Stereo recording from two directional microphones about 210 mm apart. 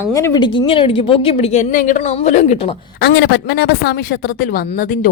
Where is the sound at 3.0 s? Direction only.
50° left (ahead or behind).